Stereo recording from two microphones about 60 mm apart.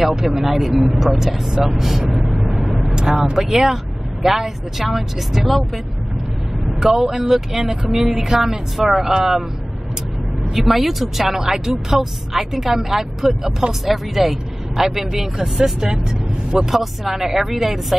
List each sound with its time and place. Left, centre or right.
0.0 s speech: centre
6.8 s speech: centre
10.5 s speech: centre